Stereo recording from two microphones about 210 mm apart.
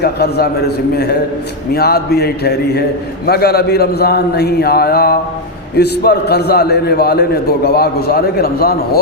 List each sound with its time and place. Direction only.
0.0 s a man's voice: 50° left (ahead or behind)
1.7 s a man's voice: 50° left (ahead or behind)